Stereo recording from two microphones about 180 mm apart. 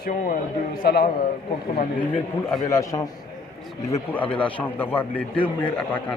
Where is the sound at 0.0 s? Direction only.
55° left (ahead or behind).